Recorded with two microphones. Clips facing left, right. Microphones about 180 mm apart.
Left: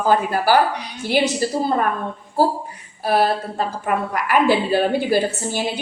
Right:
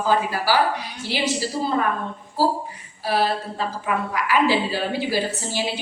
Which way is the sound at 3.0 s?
55° left (ahead or behind).